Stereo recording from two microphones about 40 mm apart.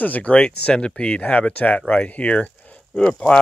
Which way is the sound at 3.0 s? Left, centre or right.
Left.